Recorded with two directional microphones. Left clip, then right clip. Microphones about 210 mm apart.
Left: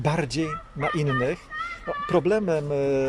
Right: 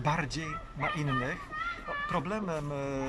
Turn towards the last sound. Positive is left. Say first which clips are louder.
# left 11 dB
turn(degrees=40)  # may be behind; listen again after turning